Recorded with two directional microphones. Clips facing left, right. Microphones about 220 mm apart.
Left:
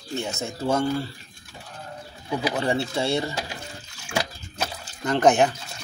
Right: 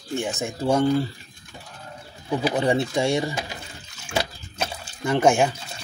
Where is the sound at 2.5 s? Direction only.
15° right (ahead or behind).